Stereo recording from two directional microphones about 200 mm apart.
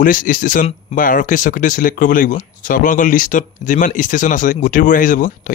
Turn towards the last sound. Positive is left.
turn(degrees=40)  # may be behind; listen again after turning